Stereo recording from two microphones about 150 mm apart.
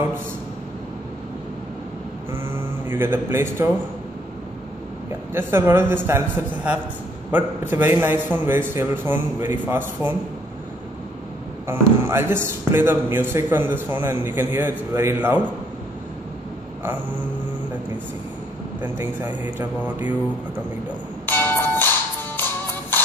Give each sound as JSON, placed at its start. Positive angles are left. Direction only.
{"t": 2.3, "sound": "a sound", "side_deg": -15}
{"t": 5.3, "sound": "a man's voice", "side_deg": -15}
{"t": 11.6, "sound": "a man's voice", "side_deg": -15}
{"t": 18.8, "sound": "a man's voice", "side_deg": -10}
{"t": 21.3, "sound": "bell", "side_deg": 15}
{"t": 22.4, "sound": "music", "side_deg": 15}